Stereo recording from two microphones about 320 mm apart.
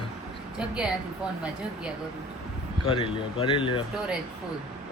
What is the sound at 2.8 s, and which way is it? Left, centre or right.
Speech, centre.